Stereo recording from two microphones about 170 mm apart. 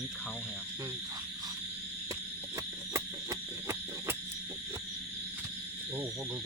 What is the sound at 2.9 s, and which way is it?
Owl, 15° right (ahead or behind).